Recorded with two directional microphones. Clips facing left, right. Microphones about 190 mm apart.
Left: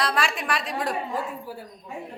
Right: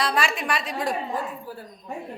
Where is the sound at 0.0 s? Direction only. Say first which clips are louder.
Right 1 dB; centre (ahead or behind).